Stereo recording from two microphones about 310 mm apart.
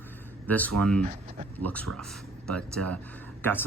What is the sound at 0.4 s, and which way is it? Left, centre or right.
Speech, centre.